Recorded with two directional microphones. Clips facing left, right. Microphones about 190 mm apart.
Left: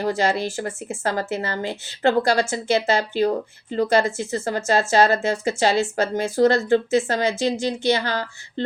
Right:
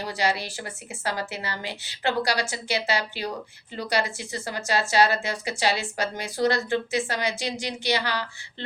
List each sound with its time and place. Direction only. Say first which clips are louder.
0.0 s a woman's voice: left 6 dB; 50° left (ahead or behind)